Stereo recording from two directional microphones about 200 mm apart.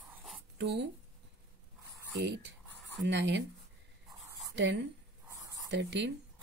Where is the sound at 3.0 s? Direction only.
60° right (ahead or behind).